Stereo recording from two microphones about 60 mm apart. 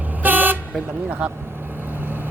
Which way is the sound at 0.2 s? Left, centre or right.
Right.